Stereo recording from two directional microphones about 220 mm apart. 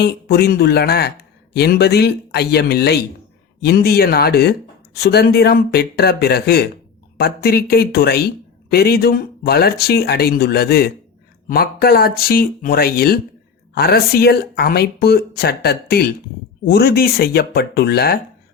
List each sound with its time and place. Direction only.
0.0 s speech: 45° left (ahead or behind)